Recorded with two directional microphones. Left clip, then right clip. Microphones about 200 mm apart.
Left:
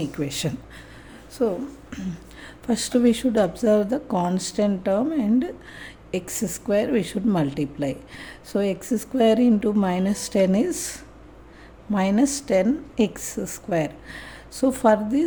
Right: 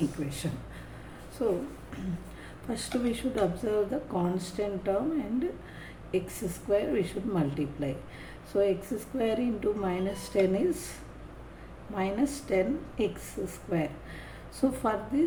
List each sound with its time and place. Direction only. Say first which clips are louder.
0.2 s speech: left 9 dB; 50° left (ahead or behind)
1.4 s speech: left 6 dB; 60° left (ahead or behind)
11.9 s speech: left 8 dB; 55° left (ahead or behind)